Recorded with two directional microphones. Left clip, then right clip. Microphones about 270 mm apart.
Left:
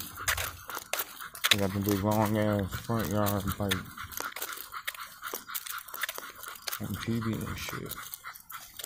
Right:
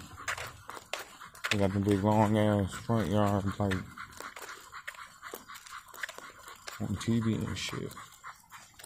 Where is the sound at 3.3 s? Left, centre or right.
Centre.